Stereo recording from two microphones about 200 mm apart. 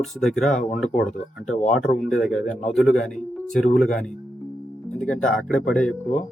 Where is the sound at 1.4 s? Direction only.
35° left (ahead or behind).